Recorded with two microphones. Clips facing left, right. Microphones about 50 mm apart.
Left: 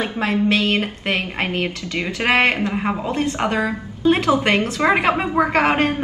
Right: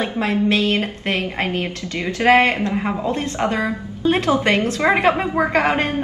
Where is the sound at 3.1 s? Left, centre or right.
Left.